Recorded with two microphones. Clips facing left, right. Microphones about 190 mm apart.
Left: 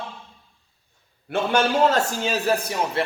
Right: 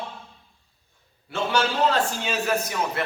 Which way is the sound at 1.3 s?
55° left (ahead or behind).